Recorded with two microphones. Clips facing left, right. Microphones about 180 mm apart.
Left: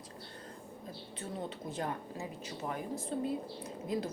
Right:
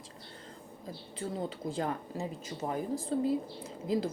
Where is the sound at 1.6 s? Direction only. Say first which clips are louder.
Right 4 dB; 30° right (ahead or behind).